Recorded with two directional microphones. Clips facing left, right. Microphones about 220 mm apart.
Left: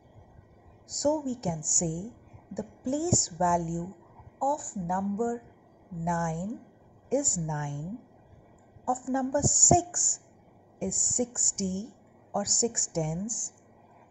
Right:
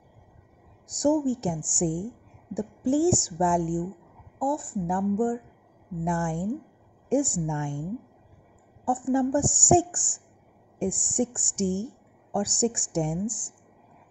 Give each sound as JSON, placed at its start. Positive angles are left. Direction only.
{"t": 0.8, "sound": "speech", "side_deg": -30}
{"t": 8.8, "sound": "speech", "side_deg": -30}